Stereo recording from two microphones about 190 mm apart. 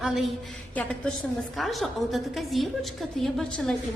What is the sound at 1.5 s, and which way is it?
A woman's voice, centre (ahead or behind).